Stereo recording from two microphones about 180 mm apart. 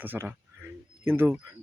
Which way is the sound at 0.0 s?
10° right (ahead or behind).